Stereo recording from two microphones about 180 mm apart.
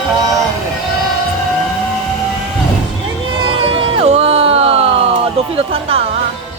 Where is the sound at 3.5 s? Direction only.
30° right (ahead or behind).